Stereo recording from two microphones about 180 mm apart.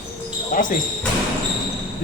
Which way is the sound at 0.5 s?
50° left (ahead or behind).